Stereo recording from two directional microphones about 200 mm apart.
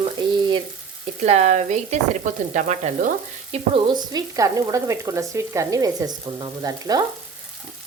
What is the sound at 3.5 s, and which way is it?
Frying, 20° right (ahead or behind).